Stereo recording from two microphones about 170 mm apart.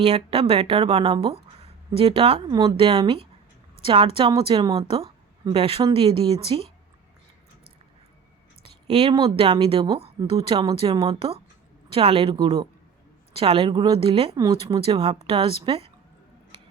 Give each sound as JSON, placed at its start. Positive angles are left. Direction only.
{"t": 0.0, "sound": "speech", "side_deg": -35}
{"t": 2.5, "sound": "speech", "side_deg": -20}
{"t": 4.9, "sound": "a woman's voice", "side_deg": -35}
{"t": 8.9, "sound": "speech", "side_deg": -35}
{"t": 14.3, "sound": "speech", "side_deg": -20}
{"t": 14.6, "sound": "speech", "side_deg": -35}